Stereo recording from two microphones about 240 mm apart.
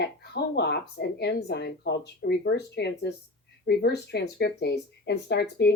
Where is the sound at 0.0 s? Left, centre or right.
Left.